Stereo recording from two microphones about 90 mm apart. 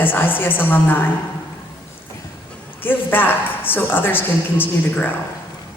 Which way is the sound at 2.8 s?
20° left (ahead or behind).